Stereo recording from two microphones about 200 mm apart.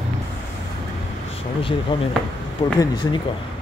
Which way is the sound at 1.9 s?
20° left (ahead or behind).